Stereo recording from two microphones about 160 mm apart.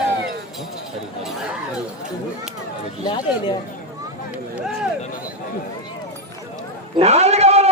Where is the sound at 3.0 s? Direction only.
25° left (ahead or behind).